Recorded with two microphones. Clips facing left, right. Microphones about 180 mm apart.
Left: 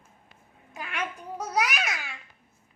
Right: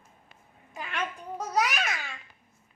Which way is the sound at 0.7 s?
5° left (ahead or behind).